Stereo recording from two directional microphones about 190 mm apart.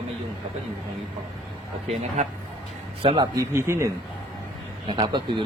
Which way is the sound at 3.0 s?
30° right (ahead or behind).